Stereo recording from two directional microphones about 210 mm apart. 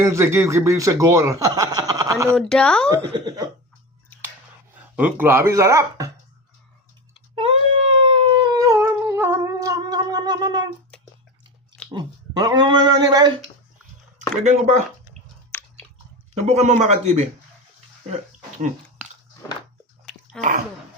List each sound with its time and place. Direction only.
0.0 s speech: 15° right (ahead or behind)
2.3 s speech: 5° left (ahead or behind)
2.9 s speech: 20° right (ahead or behind)
4.7 s speech: 10° right (ahead or behind)
7.3 s cat: 25° right (ahead or behind)
10.9 s a sound: 5° left (ahead or behind)
11.9 s speech: 20° right (ahead or behind)
16.5 s speech: 30° right (ahead or behind)
20.1 s cough: 5° left (ahead or behind)